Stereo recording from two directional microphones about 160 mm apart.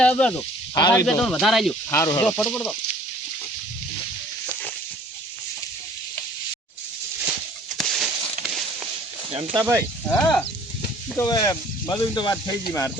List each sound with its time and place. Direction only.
0.0 s speech: 5° left (ahead or behind)
0.7 s speech: 25° left (ahead or behind)
1.0 s speech: 5° left (ahead or behind)
1.9 s speech: 20° left (ahead or behind)
2.2 s speech: 5° left (ahead or behind)
7.8 s a sound: 5° left (ahead or behind)
9.3 s speech: 35° right (ahead or behind)
9.6 s speech: 20° right (ahead or behind)
10.1 s speech: 5° left (ahead or behind)
11.2 s speech: 20° left (ahead or behind)